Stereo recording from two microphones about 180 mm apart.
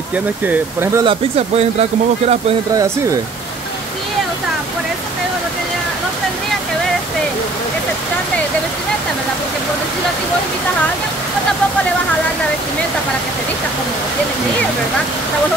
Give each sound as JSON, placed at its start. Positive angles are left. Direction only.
{"t": 0.5, "sound": "speech", "side_deg": -15}
{"t": 1.6, "sound": "speech", "side_deg": -35}